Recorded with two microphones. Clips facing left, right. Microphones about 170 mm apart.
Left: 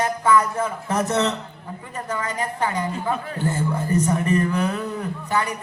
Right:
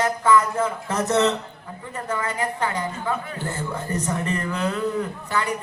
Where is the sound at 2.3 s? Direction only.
20° left (ahead or behind).